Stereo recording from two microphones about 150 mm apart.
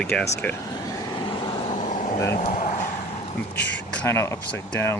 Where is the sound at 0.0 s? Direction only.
5° left (ahead or behind).